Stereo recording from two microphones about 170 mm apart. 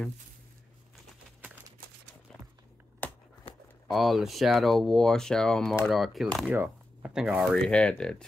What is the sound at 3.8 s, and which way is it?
Speech, centre (ahead or behind).